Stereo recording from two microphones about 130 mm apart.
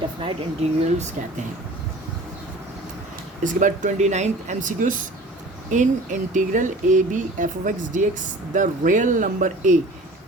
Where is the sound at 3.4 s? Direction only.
80° right.